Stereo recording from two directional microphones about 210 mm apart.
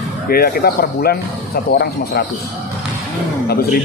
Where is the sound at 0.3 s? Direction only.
45° left (ahead or behind).